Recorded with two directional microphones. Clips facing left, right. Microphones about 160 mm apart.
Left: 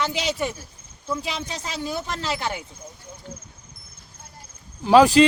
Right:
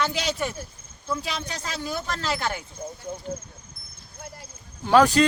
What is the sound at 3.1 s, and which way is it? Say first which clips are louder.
Speech: right 9 dB; 55° right (ahead or behind).